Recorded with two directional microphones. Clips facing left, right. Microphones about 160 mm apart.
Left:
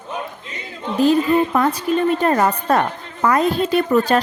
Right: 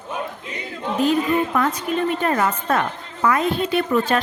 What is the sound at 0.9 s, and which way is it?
A woman's voice, 35° left (ahead or behind).